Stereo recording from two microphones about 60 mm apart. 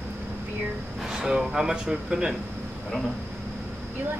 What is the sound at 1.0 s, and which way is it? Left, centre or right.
Speech, centre.